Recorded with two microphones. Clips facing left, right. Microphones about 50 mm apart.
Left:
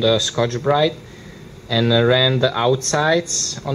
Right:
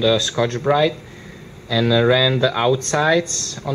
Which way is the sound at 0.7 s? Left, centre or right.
Centre.